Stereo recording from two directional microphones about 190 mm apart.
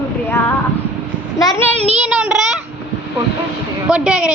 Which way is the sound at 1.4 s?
20° left (ahead or behind).